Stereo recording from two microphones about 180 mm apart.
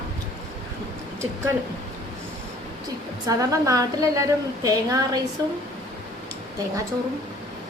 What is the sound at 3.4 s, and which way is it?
A woman's voice, 20° right (ahead or behind).